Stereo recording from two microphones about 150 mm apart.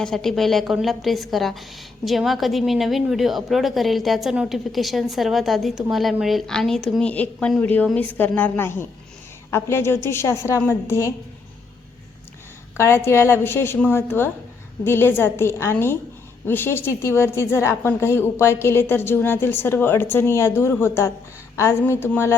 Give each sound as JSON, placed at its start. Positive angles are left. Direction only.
{"t": 0.0, "sound": "a woman's voice", "side_deg": 5}
{"t": 12.7, "sound": "a woman's voice", "side_deg": 15}